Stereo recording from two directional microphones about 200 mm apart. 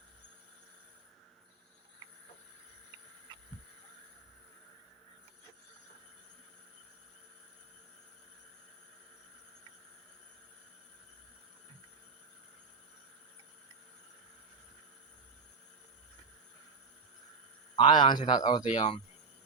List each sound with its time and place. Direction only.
17.7 s speech: 20° left (ahead or behind)